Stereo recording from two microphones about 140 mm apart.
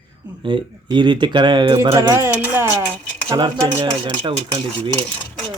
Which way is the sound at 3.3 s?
35° right (ahead or behind).